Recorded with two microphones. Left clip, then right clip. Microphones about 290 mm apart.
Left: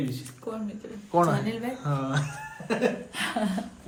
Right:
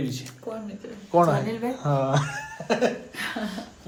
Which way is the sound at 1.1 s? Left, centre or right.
Centre.